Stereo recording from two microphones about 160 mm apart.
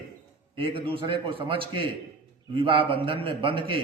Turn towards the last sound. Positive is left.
turn(degrees=-30)  # may be behind; listen again after turning